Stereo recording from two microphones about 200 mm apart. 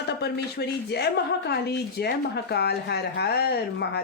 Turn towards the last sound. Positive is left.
turn(degrees=55)  # may be behind; listen again after turning